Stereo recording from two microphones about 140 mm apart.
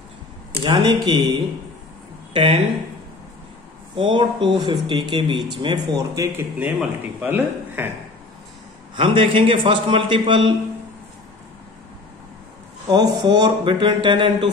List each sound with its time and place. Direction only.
1.0 s speech: 35° right (ahead or behind)
3.9 s speech: 35° right (ahead or behind)
6.3 s a man's voice: 10° right (ahead or behind)
8.9 s speech: 40° right (ahead or behind)
12.9 s speech: 30° right (ahead or behind)